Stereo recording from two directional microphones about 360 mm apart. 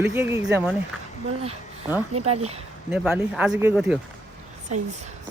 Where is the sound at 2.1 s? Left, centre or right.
Right.